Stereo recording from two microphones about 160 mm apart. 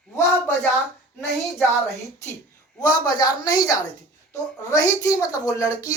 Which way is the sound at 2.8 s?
25° left (ahead or behind).